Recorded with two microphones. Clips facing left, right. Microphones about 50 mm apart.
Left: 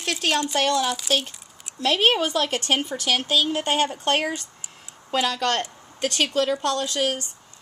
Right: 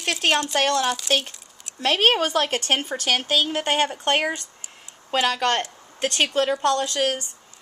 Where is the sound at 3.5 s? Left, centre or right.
Right.